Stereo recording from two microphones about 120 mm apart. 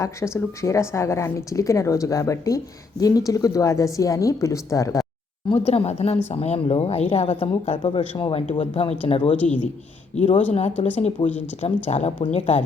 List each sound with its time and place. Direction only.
0.0 s a woman's voice: 25° left (ahead or behind)
5.5 s speech: 60° left (ahead or behind)
9.3 s speech: 10° left (ahead or behind)
10.2 s speech: 65° left (ahead or behind)